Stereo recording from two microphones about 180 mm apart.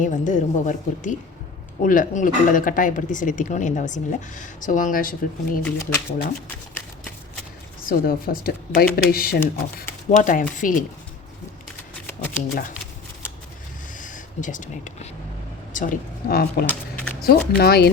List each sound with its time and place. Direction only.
0.0 s speech: 45° left (ahead or behind)
5.6 s speech: 15° left (ahead or behind)
7.9 s speech: 55° left (ahead or behind)
12.0 s shuffling cards: 10° left (ahead or behind)
14.0 s speech: 45° left (ahead or behind)